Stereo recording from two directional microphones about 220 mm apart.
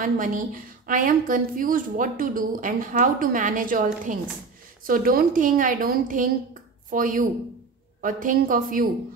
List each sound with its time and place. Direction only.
0.0 s a woman's voice: 35° right (ahead or behind)